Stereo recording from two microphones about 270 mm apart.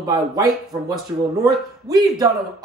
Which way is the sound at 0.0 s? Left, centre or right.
Centre.